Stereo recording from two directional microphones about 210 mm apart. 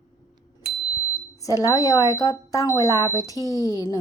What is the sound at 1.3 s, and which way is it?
Speech, 15° left (ahead or behind).